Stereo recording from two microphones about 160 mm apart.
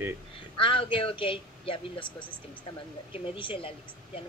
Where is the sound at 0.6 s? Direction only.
35° left (ahead or behind).